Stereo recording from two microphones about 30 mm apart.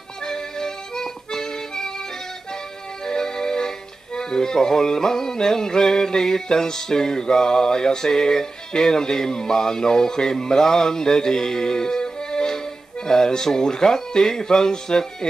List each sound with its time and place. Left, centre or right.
0.2 s music: centre
3.1 s music: centre